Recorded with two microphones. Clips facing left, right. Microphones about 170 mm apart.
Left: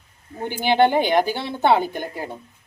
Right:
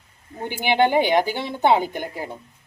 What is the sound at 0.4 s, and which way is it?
Speech, 15° right (ahead or behind).